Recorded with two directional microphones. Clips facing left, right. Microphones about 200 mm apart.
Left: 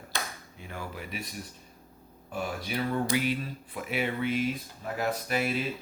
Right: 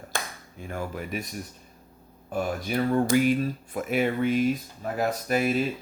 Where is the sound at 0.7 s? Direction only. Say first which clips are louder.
Right 7 dB; 45° right (ahead or behind).